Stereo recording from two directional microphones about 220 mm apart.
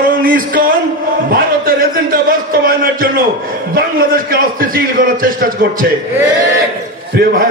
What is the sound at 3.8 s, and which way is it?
A man's voice, 40° right (ahead or behind).